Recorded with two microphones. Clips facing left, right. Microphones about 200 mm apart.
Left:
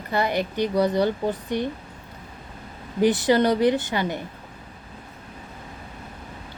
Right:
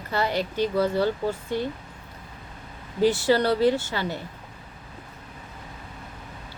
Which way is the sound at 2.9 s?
15° left (ahead or behind).